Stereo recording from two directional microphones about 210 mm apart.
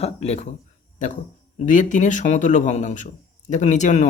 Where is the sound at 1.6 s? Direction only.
35° left (ahead or behind).